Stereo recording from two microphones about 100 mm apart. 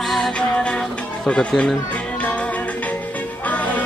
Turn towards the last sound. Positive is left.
turn(degrees=15)  # may be behind; listen again after turning